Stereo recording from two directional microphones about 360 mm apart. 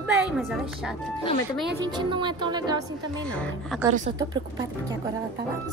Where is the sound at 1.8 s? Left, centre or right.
Centre.